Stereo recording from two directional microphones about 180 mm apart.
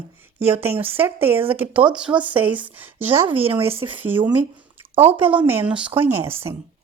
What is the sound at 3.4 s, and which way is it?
Speech, 30° right (ahead or behind).